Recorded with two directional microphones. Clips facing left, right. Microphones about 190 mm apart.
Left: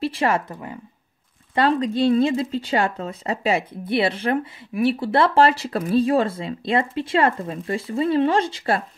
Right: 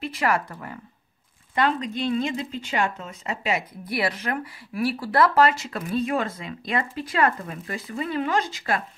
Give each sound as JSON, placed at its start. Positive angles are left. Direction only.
{"t": 0.0, "sound": "speech", "side_deg": 30}
{"t": 1.5, "sound": "speech", "side_deg": 35}